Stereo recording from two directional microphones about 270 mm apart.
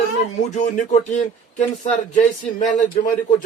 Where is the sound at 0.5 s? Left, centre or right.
Left.